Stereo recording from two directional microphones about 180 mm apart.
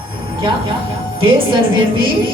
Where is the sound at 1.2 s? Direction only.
30° right (ahead or behind).